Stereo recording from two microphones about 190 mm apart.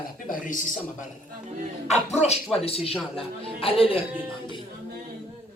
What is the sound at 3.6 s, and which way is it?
Speech, 30° left (ahead or behind).